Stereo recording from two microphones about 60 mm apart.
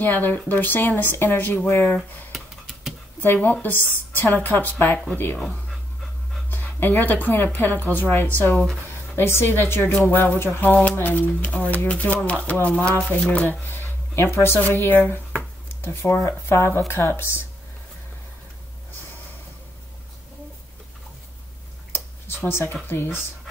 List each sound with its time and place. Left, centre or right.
0.0 s speech: left
3.2 s speech: left
6.5 s speech: left
9.1 s speech: left
22.5 s speech: left